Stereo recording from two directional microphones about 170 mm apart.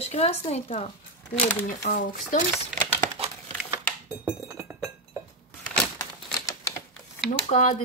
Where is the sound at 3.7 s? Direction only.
10° right (ahead or behind).